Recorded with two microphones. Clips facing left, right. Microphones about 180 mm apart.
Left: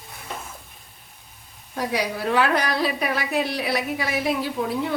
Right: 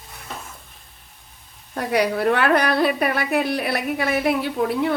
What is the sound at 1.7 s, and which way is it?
Speech, 60° right (ahead or behind).